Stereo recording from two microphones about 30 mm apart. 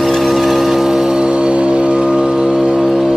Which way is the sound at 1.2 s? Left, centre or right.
Right.